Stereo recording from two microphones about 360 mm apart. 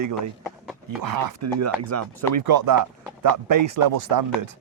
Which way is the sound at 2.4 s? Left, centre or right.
Right.